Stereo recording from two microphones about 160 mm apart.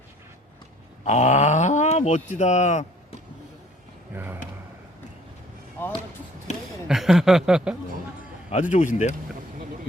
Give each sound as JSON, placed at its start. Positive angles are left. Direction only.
{"t": 1.0, "sound": "speech", "side_deg": 45}
{"t": 4.1, "sound": "speech", "side_deg": -15}
{"t": 5.8, "sound": "speech", "side_deg": 15}
{"t": 6.8, "sound": "speech", "side_deg": 0}
{"t": 8.4, "sound": "speech", "side_deg": 45}